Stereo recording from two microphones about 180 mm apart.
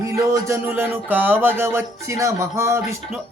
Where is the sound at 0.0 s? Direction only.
15° right (ahead or behind).